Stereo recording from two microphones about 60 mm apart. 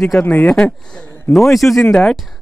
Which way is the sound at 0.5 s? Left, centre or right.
Centre.